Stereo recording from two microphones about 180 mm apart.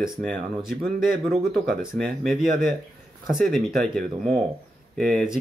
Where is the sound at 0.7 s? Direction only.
50° right (ahead or behind).